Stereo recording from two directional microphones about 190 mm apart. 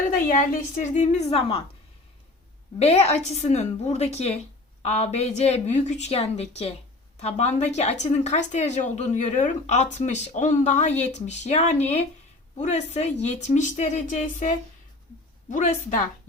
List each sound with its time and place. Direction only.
0.1 s a woman's voice: 45° left (ahead or behind)
2.7 s a woman's voice: 35° left (ahead or behind)